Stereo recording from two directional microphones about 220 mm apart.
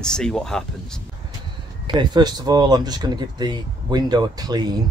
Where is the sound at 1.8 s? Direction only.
20° right (ahead or behind).